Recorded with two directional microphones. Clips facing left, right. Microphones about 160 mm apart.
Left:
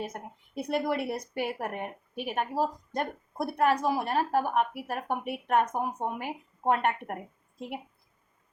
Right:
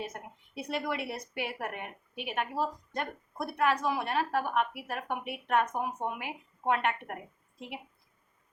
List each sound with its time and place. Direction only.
0.0 s a woman's voice: 40° left (ahead or behind)